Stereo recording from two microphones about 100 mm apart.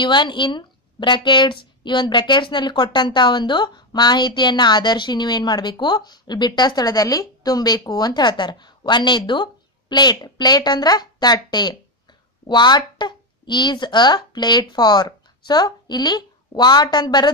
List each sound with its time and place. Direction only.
0.0 s a woman's voice: 50° left (ahead or behind)